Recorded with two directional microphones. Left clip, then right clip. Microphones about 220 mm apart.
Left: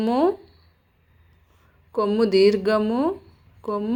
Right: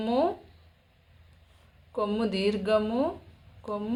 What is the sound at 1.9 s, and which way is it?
Speech, 30° left (ahead or behind).